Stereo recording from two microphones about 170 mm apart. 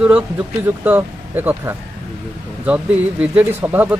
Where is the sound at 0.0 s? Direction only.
10° right (ahead or behind).